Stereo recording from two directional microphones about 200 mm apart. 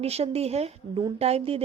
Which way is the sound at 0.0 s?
30° right (ahead or behind).